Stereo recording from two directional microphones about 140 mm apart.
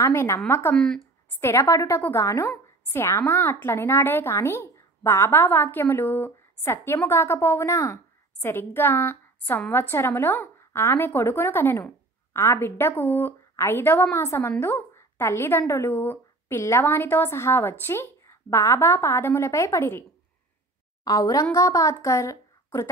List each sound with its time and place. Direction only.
0.0 s a woman's voice: 15° left (ahead or behind)
0.7 s speech: 5° left (ahead or behind)
1.4 s a woman's voice: 20° left (ahead or behind)
21.0 s speech: 25° left (ahead or behind)